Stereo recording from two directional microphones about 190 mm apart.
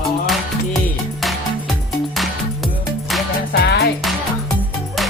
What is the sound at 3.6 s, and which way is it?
Music, 60° left (ahead or behind).